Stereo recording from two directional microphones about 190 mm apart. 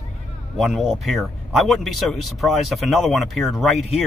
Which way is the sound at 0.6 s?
Centre (ahead or behind).